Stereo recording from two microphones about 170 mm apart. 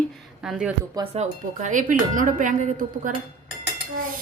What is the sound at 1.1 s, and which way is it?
Speech, 45° right (ahead or behind).